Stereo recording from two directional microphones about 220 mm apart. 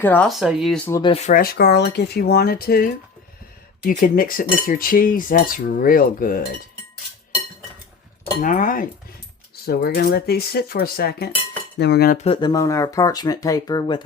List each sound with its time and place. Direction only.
0.0 s speech: 5° left (ahead or behind)
0.9 s speech: 15° left (ahead or behind)
1.1 s speech: 35° left (ahead or behind)
3.8 s cutlery: 40° left (ahead or behind)
8.4 s cutlery: 35° left (ahead or behind)
9.6 s speech: 45° left (ahead or behind)
12.1 s speech: 25° left (ahead or behind)